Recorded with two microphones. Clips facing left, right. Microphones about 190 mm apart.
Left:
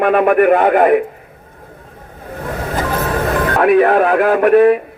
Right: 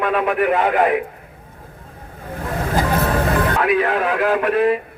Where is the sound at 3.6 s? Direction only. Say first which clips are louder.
Left 7 dB; 55° left (ahead or behind).